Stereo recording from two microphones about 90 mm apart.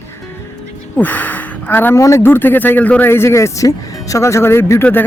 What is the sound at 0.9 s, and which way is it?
Speech, 20° left (ahead or behind).